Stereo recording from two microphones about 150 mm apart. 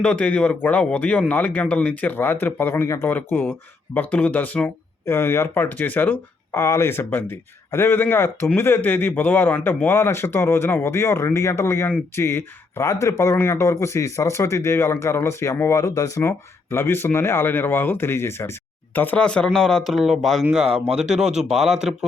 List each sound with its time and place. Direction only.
0.0 s speech: 10° left (ahead or behind)